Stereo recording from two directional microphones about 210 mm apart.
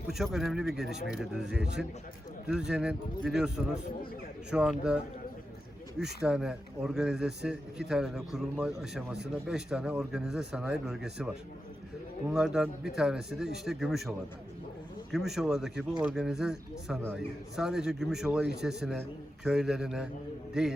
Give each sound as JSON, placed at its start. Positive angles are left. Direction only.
{"t": 0.1, "sound": "speech", "side_deg": 0}
{"t": 6.2, "sound": "speech", "side_deg": -5}